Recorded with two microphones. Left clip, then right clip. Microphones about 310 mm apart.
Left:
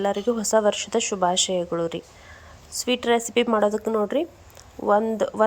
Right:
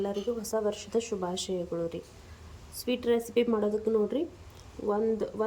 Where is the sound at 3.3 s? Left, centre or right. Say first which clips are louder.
Left 7 dB; left.